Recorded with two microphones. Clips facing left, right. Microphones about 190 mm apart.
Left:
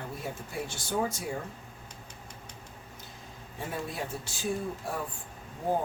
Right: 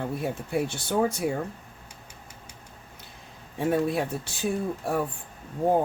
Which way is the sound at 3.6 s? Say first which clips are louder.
Right 12 dB; 65° right (ahead or behind).